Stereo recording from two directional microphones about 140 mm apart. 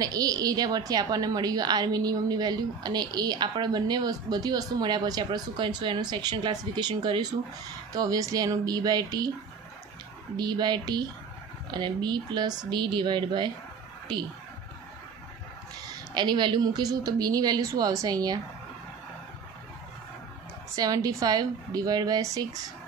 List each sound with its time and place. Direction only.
0.0 s a woman's voice: 25° right (ahead or behind)
10.3 s a woman's voice: 30° right (ahead or behind)
16.1 s a woman's voice: 30° right (ahead or behind)
20.7 s a woman's voice: 25° right (ahead or behind)